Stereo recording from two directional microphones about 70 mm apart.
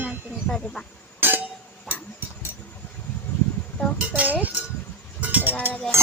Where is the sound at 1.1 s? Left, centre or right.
Right.